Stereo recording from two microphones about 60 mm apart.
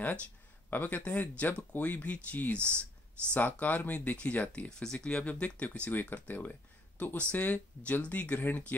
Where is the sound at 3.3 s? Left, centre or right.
Left.